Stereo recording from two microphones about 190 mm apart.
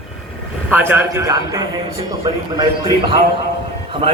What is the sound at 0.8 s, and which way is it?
Speech, 10° right (ahead or behind).